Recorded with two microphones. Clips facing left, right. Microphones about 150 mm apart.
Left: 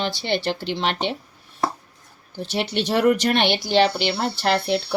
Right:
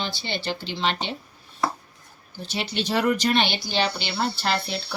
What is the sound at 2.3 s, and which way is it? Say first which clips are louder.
Speech: left 5 dB; 70° left (ahead or behind).